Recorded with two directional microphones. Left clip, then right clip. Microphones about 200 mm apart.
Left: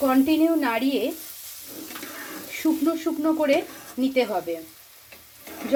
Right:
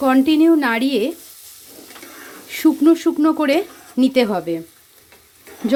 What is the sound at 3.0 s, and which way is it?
Speech, 60° right (ahead or behind).